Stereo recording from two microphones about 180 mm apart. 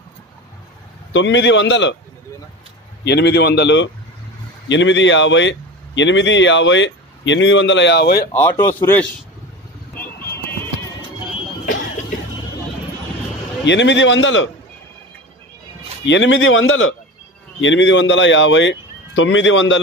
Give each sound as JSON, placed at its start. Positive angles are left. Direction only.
{"t": 1.1, "sound": "speech", "side_deg": 85}
{"t": 3.0, "sound": "a man's voice", "side_deg": 70}
{"t": 8.3, "sound": "speech", "side_deg": 15}
{"t": 9.9, "sound": "vehicle", "side_deg": 10}
{"t": 10.3, "sound": "music", "side_deg": 15}
{"t": 13.7, "sound": "speech", "side_deg": 85}
{"t": 16.1, "sound": "speech", "side_deg": 90}